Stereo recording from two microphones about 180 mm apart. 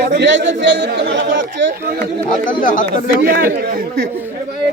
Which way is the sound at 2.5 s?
50° left (ahead or behind).